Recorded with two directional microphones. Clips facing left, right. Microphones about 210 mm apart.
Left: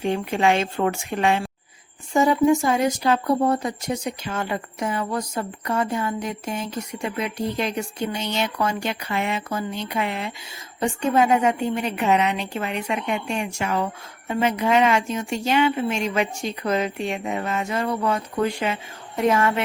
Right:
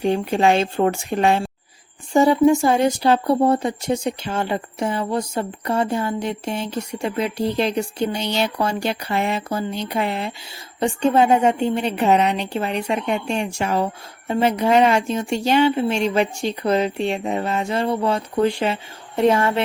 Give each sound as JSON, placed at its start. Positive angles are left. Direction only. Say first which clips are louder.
{"t": 0.0, "sound": "a woman's voice", "louder": "right 3 dB", "side_deg": -35}